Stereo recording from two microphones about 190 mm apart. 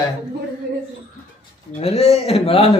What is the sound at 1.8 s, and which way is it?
Speech, 35° left (ahead or behind).